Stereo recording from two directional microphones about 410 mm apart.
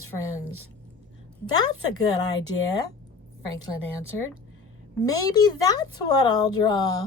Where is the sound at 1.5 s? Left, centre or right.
Centre.